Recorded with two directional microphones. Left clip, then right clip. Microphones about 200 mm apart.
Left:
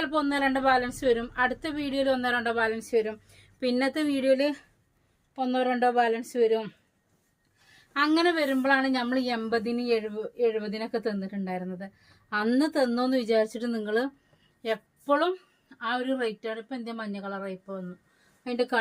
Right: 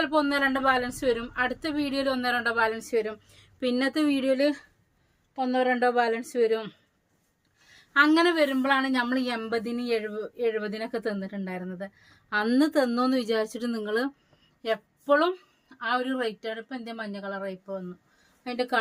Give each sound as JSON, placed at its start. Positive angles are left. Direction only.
{"t": 0.0, "sound": "a woman's voice", "side_deg": -20}
{"t": 7.9, "sound": "a woman's voice", "side_deg": -20}